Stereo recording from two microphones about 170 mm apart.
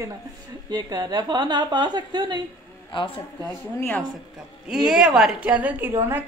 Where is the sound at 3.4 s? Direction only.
10° left (ahead or behind).